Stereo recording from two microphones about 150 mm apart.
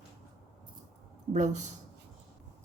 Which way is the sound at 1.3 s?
55° right (ahead or behind).